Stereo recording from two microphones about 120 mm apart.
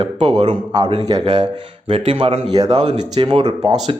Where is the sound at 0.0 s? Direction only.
50° right (ahead or behind).